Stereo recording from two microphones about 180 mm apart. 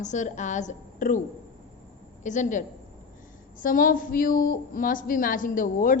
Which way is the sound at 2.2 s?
45° left (ahead or behind).